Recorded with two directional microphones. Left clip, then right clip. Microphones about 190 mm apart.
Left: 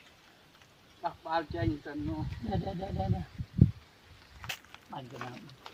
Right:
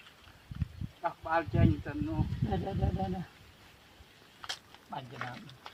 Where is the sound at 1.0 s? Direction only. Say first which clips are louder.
Right 1 dB; 20° right (ahead or behind).